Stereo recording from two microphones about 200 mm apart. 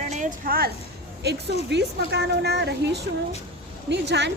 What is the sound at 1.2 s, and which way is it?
A woman's voice, 55° right (ahead or behind).